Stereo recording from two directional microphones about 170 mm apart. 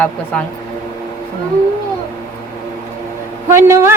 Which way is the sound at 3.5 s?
15° right (ahead or behind).